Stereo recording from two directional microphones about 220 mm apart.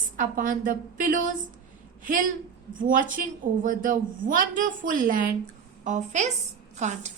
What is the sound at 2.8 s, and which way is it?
A woman's voice, 40° right (ahead or behind).